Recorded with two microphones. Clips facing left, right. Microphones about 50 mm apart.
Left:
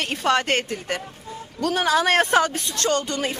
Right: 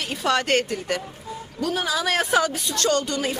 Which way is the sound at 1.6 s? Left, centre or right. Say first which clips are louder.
Left 3 dB; left.